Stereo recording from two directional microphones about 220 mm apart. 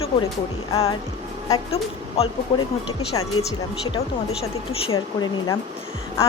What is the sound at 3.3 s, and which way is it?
Speech, 75° left (ahead or behind).